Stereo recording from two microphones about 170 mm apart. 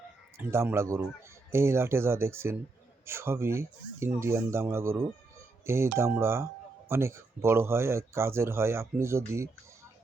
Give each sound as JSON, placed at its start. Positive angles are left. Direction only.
{"t": 0.3, "sound": "speech", "side_deg": -15}